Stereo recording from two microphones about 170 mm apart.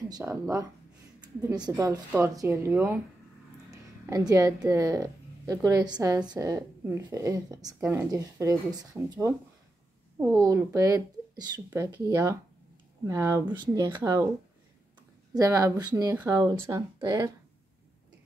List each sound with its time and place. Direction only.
0.1 s a woman's voice: 20° right (ahead or behind)
3.7 s a sound: 20° right (ahead or behind)
4.3 s a woman's voice: 20° right (ahead or behind)
15.3 s a woman's voice: 20° right (ahead or behind)